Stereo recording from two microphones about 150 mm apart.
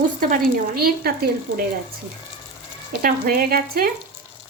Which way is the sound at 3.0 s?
65° right (ahead or behind).